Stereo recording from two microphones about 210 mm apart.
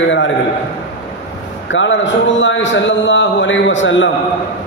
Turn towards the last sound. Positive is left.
turn(degrees=60)  # may be behind; listen again after turning